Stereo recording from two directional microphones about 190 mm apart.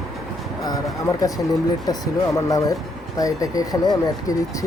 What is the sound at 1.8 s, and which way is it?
Speech, 20° left (ahead or behind).